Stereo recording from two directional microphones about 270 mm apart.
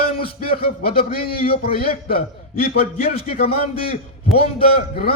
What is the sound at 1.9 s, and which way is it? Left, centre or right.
Speech, left.